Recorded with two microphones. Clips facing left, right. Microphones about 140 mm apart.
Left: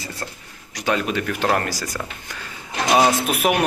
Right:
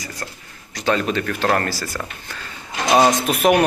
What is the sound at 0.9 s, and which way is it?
Speech, 10° left (ahead or behind).